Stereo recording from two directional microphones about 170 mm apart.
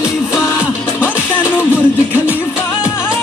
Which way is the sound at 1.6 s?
10° right (ahead or behind).